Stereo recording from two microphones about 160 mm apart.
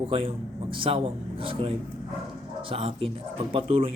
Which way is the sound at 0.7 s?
35° right (ahead or behind).